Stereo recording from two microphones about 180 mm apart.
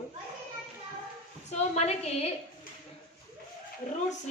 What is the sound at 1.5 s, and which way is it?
Speech, 40° left (ahead or behind).